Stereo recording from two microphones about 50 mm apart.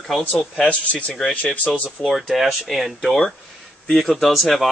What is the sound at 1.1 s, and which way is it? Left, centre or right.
Speech, centre.